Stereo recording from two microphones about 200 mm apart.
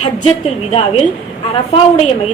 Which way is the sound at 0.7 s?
30° left (ahead or behind).